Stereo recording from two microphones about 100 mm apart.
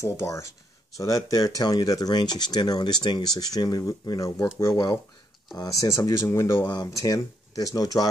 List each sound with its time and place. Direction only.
0.0 s speech: 30° left (ahead or behind)